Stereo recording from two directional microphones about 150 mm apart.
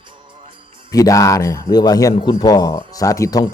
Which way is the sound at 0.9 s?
25° left (ahead or behind).